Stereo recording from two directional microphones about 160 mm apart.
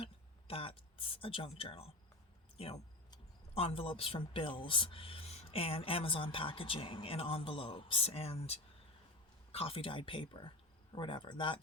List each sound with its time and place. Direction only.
0.0 s speech: 35° left (ahead or behind)